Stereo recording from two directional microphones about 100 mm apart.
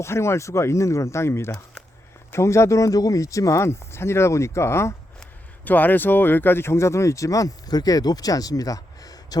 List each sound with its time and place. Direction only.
0.0 s speech: 25° left (ahead or behind)